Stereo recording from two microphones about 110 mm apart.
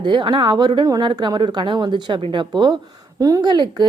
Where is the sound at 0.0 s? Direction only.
45° right (ahead or behind).